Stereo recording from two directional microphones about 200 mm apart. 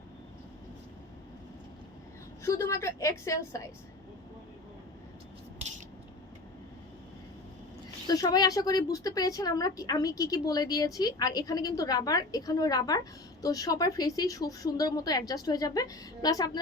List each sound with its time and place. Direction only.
2.4 s a woman's voice: 15° left (ahead or behind)
8.0 s speech: 20° left (ahead or behind)